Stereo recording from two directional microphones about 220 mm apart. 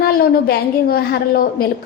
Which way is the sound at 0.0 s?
45° left (ahead or behind).